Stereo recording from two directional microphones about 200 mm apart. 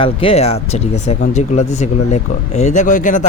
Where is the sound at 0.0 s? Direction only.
30° left (ahead or behind).